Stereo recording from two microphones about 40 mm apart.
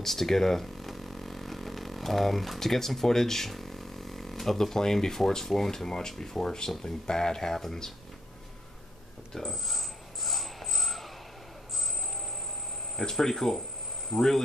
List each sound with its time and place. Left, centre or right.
0.0 s speech: centre
9.3 s a sound: centre
13.1 s speech: centre